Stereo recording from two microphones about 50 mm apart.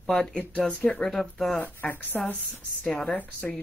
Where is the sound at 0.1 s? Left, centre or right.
Centre.